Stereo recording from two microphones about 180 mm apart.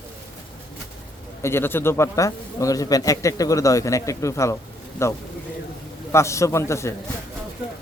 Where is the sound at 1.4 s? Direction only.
15° left (ahead or behind).